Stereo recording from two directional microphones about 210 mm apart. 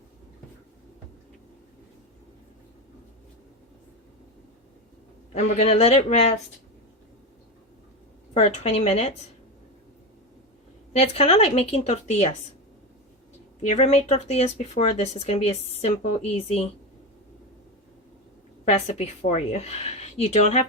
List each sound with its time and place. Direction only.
5.3 s speech: 35° left (ahead or behind)
8.3 s a woman's voice: 30° left (ahead or behind)
10.9 s a woman's voice: 30° left (ahead or behind)
13.7 s speech: 30° left (ahead or behind)
18.6 s speech: 30° left (ahead or behind)